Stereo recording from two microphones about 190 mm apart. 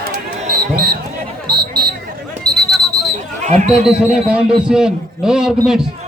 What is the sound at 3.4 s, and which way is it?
Speech, 35° right (ahead or behind).